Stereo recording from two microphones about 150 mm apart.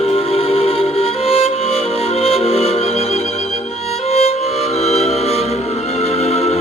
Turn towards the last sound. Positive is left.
turn(degrees=45)  # may be behind; listen again after turning